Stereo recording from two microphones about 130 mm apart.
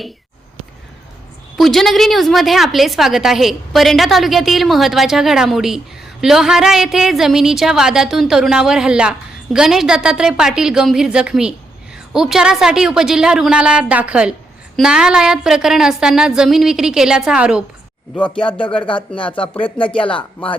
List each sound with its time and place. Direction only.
1.5 s a woman's voice: centre (ahead or behind)
18.1 s speech: 10° left (ahead or behind)
18.4 s speech: 40° left (ahead or behind)